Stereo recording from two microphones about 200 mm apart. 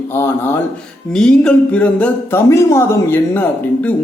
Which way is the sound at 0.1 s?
10° left (ahead or behind).